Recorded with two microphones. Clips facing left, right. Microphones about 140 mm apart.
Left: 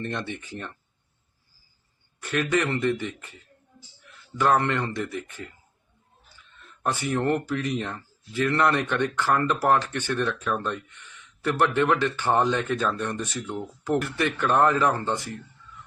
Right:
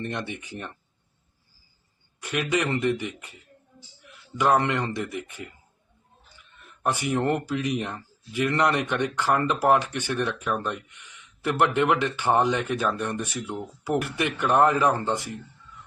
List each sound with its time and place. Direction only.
0.0 s speech: 15° right (ahead or behind)
2.2 s a man's voice: 15° right (ahead or behind)